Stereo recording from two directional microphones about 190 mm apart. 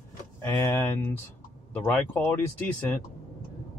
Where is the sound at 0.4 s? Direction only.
10° left (ahead or behind).